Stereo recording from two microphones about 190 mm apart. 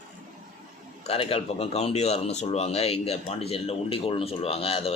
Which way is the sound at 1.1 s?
30° left (ahead or behind).